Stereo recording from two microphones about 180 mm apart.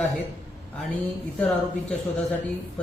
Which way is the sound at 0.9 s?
5° left (ahead or behind).